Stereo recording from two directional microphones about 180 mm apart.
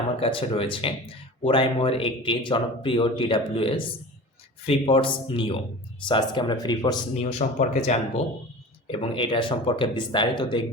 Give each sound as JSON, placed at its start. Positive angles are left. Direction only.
{"t": 0.2, "sound": "speech", "side_deg": 30}
{"t": 7.2, "sound": "speech", "side_deg": 40}